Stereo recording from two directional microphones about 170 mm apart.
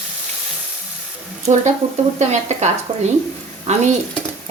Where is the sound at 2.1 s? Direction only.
40° right (ahead or behind).